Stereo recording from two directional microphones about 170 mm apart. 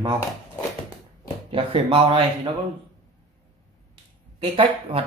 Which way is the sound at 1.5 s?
30° right (ahead or behind).